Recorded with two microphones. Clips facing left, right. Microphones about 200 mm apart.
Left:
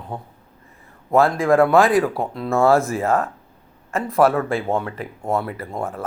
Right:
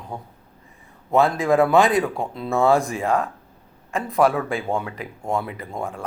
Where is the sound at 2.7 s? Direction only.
15° right (ahead or behind).